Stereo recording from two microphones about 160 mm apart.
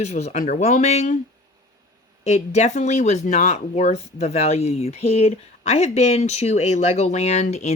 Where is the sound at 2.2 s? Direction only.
45° left (ahead or behind).